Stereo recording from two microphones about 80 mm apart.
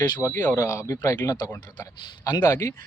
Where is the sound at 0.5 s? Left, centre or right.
Left.